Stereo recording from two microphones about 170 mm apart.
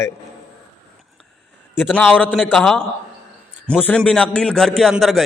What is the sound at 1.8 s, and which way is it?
Speech, 5° left (ahead or behind).